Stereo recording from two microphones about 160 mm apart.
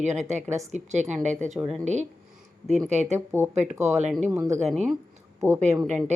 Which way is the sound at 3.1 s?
15° right (ahead or behind).